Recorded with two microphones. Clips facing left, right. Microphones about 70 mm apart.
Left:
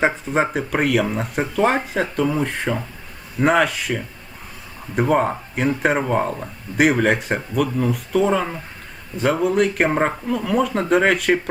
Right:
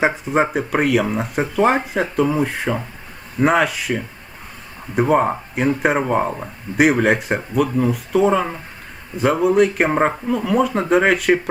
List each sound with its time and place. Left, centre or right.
0.0 s speech: centre